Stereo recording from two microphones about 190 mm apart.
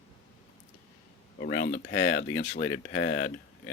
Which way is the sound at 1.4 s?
50° left (ahead or behind).